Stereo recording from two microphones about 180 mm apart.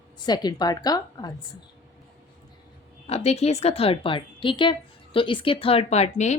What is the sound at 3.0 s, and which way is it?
A woman's voice, 35° left (ahead or behind).